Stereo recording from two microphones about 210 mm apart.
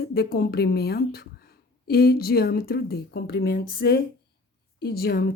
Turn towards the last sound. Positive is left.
turn(degrees=50)  # may be behind; listen again after turning